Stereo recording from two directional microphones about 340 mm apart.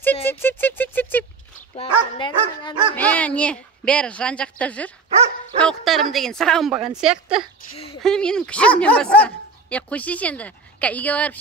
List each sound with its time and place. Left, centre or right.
0.0 s speech: centre
7.7 s speech: centre
8.0 s speech: centre